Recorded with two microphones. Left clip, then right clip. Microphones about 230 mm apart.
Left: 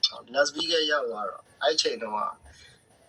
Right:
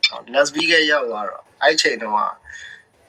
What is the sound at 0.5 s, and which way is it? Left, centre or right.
Speech, right.